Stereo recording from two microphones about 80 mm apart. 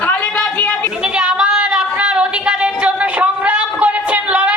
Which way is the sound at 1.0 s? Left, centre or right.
Centre.